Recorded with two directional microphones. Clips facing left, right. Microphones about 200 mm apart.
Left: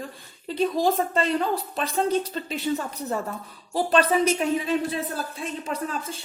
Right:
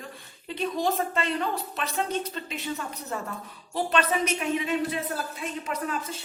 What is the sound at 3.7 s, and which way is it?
Speech, 35° left (ahead or behind).